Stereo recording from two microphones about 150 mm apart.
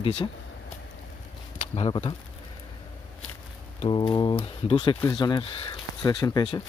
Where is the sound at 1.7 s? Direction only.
35° left (ahead or behind).